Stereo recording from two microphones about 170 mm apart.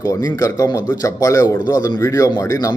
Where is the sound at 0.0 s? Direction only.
20° left (ahead or behind).